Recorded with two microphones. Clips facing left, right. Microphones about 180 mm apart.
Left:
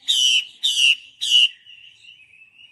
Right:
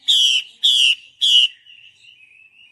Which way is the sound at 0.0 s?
10° left (ahead or behind).